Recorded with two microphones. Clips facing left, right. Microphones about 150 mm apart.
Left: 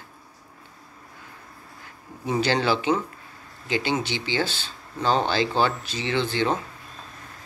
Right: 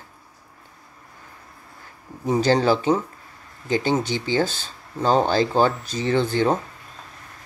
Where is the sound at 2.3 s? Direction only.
40° right (ahead or behind).